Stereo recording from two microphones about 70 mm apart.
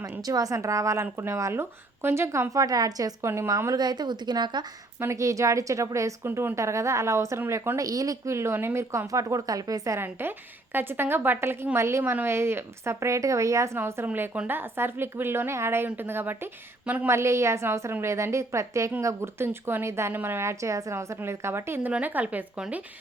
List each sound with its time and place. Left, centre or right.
0.0 s a woman's voice: right
3.2 s a woman's voice: right
3.7 s speech: right
4.9 s a woman's voice: right
6.2 s a woman's voice: right
7.8 s a woman's voice: right
9.1 s speech: right
10.0 s a woman's voice: right
13.7 s a woman's voice: right
17.1 s a woman's voice: right
21.9 s a woman's voice: right